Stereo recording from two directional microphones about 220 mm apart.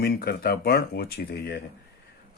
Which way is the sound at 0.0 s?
45° left (ahead or behind).